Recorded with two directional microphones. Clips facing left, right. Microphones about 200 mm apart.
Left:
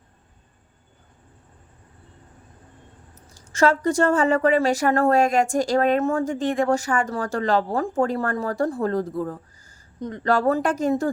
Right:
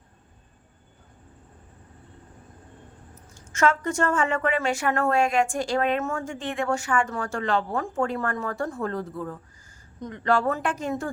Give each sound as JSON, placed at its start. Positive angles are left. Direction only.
{"t": 3.3, "sound": "a woman's voice", "side_deg": 35}